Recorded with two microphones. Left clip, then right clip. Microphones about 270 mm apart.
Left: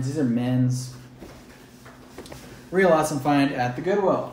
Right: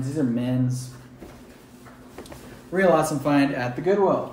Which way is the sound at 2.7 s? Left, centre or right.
Centre.